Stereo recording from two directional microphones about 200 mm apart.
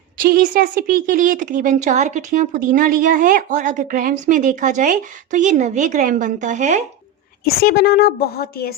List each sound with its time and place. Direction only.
0.2 s a woman's voice: 45° right (ahead or behind)
7.4 s a woman's voice: 50° left (ahead or behind)